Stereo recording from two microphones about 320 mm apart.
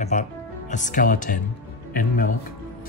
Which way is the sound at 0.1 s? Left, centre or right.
Left.